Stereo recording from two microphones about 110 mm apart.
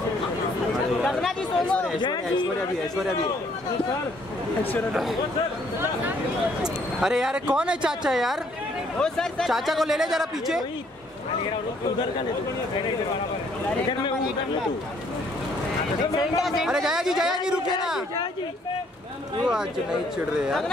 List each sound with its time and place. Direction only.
1.0 s chatter: 5° left (ahead or behind)
2.0 s a man's voice: 45° left (ahead or behind)
6.6 s speech: 5° right (ahead or behind)
13.8 s a man's voice: 45° left (ahead or behind)
16.2 s speech: centre (ahead or behind)
19.4 s speech: 5° right (ahead or behind)